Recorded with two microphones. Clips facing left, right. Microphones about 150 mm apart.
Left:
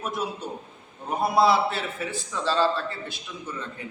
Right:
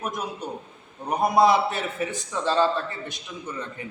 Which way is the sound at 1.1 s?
20° right (ahead or behind).